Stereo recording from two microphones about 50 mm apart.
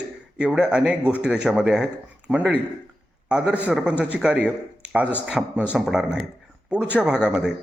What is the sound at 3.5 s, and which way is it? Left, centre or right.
A man's voice, right.